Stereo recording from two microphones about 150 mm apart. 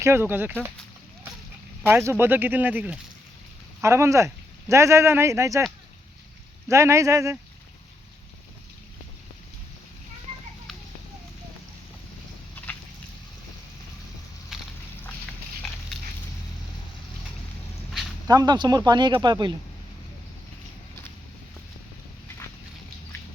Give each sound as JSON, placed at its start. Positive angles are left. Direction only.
{"t": 0.0, "sound": "speech", "side_deg": -15}
{"t": 1.8, "sound": "speech", "side_deg": -15}
{"t": 6.7, "sound": "speech", "side_deg": -20}
{"t": 14.5, "sound": "a sound", "side_deg": -5}
{"t": 18.3, "sound": "speech", "side_deg": -25}